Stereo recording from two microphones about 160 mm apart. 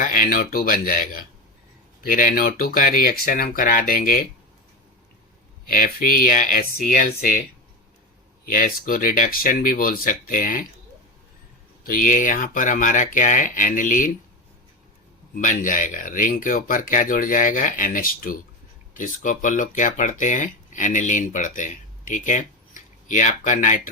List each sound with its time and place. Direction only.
0.0 s speech: 60° left (ahead or behind)
5.6 s speech: 60° left (ahead or behind)
8.4 s speech: 60° left (ahead or behind)
11.9 s speech: 55° left (ahead or behind)
15.4 s speech: 55° left (ahead or behind)